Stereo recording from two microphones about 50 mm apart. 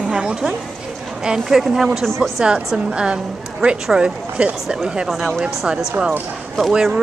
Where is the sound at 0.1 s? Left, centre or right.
Centre.